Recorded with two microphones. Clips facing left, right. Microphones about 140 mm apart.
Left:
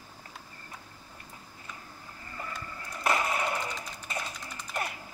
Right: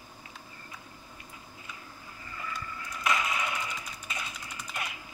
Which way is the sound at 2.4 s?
40° left (ahead or behind).